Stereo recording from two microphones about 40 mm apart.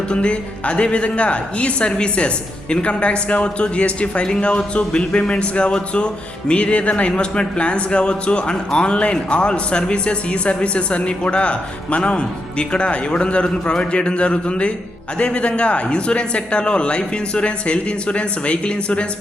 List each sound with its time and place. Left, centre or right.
0.1 s speech: left